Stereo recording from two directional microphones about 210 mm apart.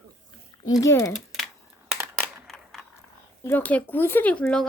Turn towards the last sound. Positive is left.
turn(degrees=5)  # may be behind; listen again after turning